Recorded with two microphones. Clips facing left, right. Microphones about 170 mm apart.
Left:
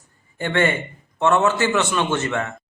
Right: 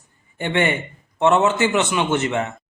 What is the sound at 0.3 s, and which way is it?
A man's voice, 20° right (ahead or behind).